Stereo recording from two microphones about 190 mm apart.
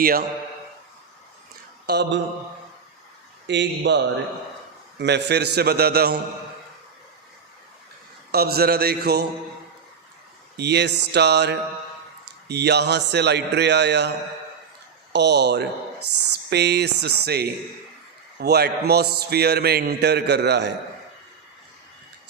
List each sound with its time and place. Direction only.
0.0 s a man's voice: 50° right (ahead or behind)
1.9 s a man's voice: 65° right (ahead or behind)
3.4 s a man's voice: 65° right (ahead or behind)
8.3 s a man's voice: 55° right (ahead or behind)
10.6 s a man's voice: 60° right (ahead or behind)
15.1 s a man's voice: 60° right (ahead or behind)